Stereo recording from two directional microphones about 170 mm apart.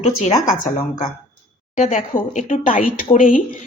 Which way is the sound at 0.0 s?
45° left (ahead or behind).